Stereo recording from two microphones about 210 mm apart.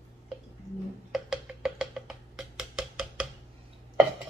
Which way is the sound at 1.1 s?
Centre (ahead or behind).